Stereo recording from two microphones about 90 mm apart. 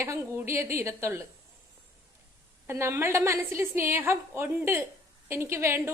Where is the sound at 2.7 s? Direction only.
30° right (ahead or behind).